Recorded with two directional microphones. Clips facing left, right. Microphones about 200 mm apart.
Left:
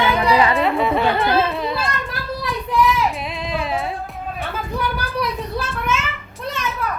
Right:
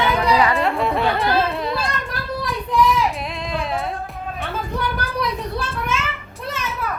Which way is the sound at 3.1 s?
Centre (ahead or behind).